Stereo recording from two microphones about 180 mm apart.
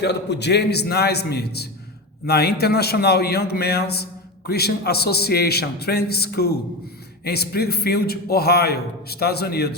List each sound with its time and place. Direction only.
0.0 s a man's voice: 70° left (ahead or behind)